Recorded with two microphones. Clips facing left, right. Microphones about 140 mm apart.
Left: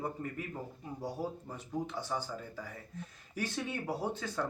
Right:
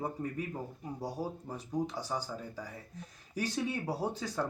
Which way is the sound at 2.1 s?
15° right (ahead or behind).